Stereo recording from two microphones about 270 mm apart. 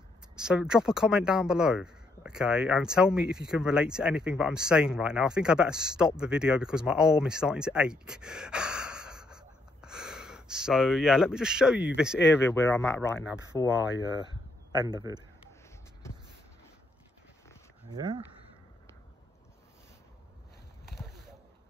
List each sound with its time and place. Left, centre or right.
0.4 s speech: centre
12.3 s speech: centre
14.1 s speech: centre
17.9 s speech: centre